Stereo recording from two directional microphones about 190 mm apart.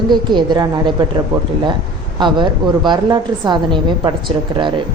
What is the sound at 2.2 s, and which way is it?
A woman's voice, 25° right (ahead or behind).